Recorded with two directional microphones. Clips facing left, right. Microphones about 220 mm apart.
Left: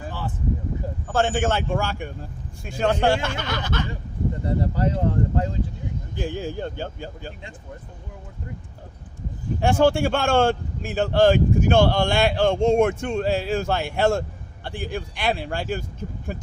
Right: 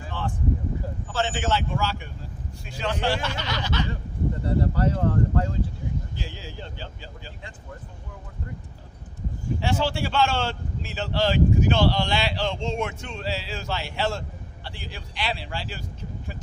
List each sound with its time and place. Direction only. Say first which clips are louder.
0.1 s a sound: right 3 dB; 5° left (ahead or behind)
1.0 s speech: left 6 dB; 50° left (ahead or behind)
4.4 s speech: even; 20° left (ahead or behind)
6.1 s speech: left 10 dB; 50° left (ahead or behind)
9.6 s speech: left 8 dB; 50° left (ahead or behind)